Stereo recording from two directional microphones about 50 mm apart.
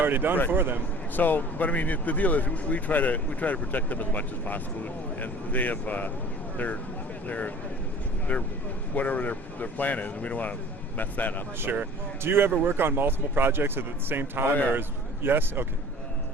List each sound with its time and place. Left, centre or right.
0.0 s speech: right
1.1 s speech: left
7.3 s speech: left
11.6 s speech: right